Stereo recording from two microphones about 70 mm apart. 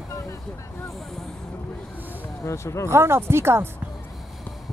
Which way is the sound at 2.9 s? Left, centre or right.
Right.